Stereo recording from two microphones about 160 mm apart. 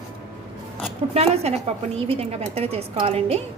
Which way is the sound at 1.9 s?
40° right (ahead or behind).